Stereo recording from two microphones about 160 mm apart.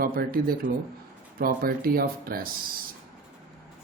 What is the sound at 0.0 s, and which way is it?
Speech, 65° right (ahead or behind).